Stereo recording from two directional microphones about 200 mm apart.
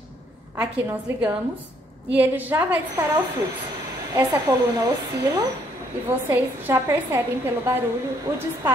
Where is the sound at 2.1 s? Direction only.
10° right (ahead or behind).